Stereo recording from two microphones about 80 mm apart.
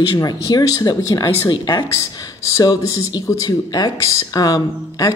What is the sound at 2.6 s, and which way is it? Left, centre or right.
Speech, left.